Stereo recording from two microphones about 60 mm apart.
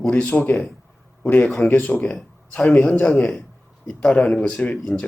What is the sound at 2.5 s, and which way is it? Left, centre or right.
Speech, centre.